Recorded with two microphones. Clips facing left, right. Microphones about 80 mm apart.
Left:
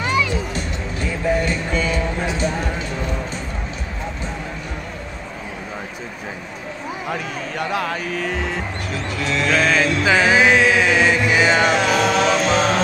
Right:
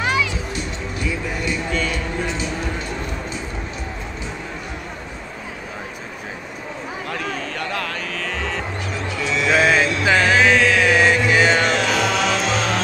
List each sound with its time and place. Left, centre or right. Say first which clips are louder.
1.0 s music: left 5 dB; left
1.7 s a sound: left 2 dB; centre
7.1 s cattle: even; centre
9.2 s mantra: right 1 dB; centre
10.8 s chant: right 1 dB; centre
11.2 s chant: left 1 dB; centre
12.5 s music: left 4 dB; centre